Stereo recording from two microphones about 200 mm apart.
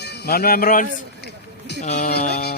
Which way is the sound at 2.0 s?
50° left (ahead or behind).